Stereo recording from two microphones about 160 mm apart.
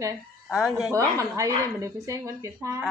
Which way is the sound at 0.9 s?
20° right (ahead or behind).